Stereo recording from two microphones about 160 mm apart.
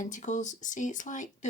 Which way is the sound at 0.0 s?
50° left (ahead or behind).